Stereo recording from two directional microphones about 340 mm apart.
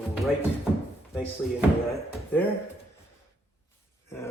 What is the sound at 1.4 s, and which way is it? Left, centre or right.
Speech, centre.